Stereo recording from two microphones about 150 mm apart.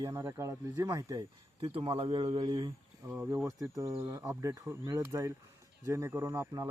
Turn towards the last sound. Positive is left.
turn(degrees=-20)  # may be behind; listen again after turning